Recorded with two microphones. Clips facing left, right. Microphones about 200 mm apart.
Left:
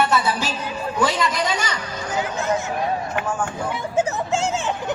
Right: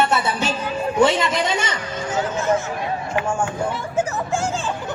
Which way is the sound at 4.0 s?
20° left (ahead or behind).